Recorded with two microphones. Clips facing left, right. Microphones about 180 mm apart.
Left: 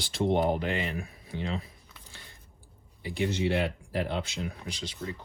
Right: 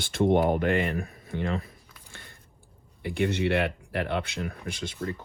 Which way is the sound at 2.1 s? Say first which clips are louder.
Right 4 dB; 55° right (ahead or behind).